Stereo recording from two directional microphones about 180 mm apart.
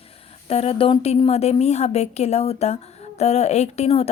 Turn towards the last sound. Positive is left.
turn(degrees=35)  # may be behind; listen again after turning